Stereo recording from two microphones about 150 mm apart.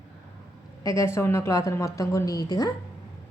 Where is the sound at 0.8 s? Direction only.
20° left (ahead or behind).